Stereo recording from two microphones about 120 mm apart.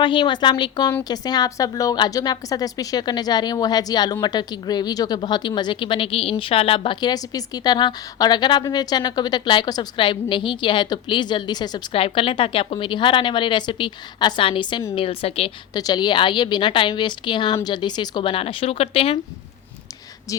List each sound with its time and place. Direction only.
0.0 s a woman's voice: 40° left (ahead or behind)
11.9 s a woman's voice: 50° left (ahead or behind)
14.9 s a woman's voice: 55° left (ahead or behind)
15.7 s a woman's voice: 35° left (ahead or behind); by 19.2 s 55° left (ahead or behind)